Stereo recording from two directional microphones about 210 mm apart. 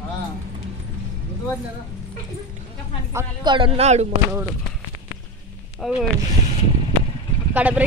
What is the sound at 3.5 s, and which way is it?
Speech, 25° right (ahead or behind).